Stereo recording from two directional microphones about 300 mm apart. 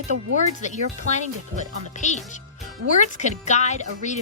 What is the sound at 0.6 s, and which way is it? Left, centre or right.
Speech, left.